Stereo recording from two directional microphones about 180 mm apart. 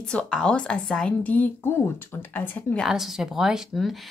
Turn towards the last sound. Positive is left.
turn(degrees=0)  # may be behind; listen again after turning